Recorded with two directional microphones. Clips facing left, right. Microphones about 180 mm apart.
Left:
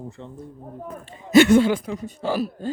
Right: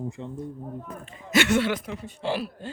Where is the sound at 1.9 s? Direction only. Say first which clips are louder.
Left 3 dB; 40° left (ahead or behind).